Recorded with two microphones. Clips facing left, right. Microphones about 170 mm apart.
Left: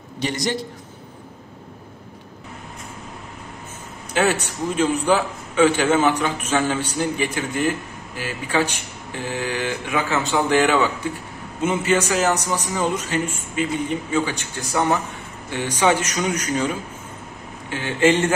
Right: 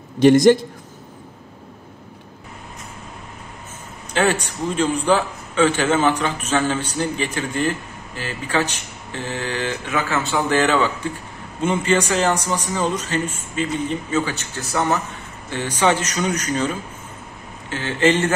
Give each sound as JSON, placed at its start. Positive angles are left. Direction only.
{"t": 0.2, "sound": "a man's voice", "side_deg": -50}
{"t": 4.1, "sound": "a man's voice", "side_deg": 10}